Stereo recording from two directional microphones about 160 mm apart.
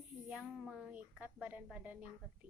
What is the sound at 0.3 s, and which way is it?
A woman's voice, 5° right (ahead or behind).